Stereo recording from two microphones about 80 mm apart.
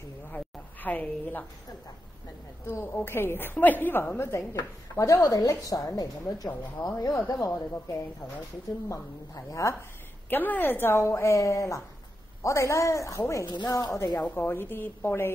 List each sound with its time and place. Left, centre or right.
0.8 s a woman's voice: left
2.6 s a woman's voice: left
5.2 s a woman's voice: left
10.3 s a woman's voice: left
14.2 s a woman's voice: left